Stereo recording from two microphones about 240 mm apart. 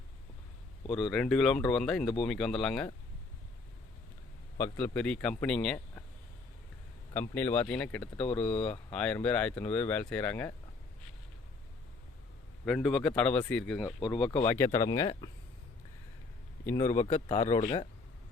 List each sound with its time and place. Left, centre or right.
0.9 s speech: centre
4.5 s speech: centre
7.1 s speech: centre
12.6 s speech: centre
16.6 s speech: centre
16.9 s speech: left